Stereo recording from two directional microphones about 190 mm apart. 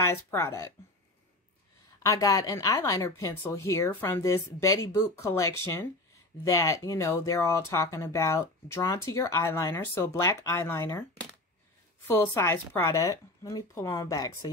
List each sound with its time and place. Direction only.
0.0 s speech: 15° left (ahead or behind)
2.0 s speech: 15° left (ahead or behind)